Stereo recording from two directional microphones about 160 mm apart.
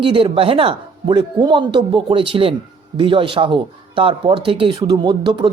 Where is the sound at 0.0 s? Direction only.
35° right (ahead or behind).